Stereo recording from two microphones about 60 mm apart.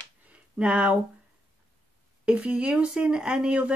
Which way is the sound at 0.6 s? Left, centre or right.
Centre.